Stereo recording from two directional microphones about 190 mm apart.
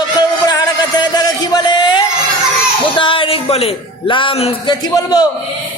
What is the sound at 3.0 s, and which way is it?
Music, 25° left (ahead or behind).